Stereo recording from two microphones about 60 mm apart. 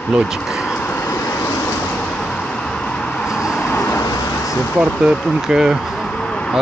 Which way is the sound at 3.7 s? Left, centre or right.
Left.